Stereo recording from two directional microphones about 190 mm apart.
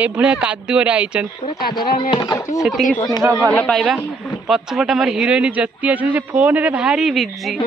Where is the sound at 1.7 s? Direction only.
20° left (ahead or behind).